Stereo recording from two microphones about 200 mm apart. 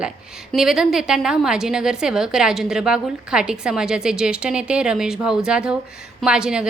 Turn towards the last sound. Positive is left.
turn(degrees=-5)  # may be behind; listen again after turning